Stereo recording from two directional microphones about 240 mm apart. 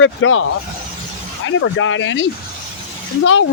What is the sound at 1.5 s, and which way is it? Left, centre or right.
Speech, left.